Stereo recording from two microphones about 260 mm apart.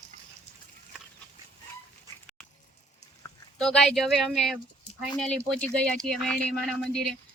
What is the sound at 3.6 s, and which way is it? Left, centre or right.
Speech, centre.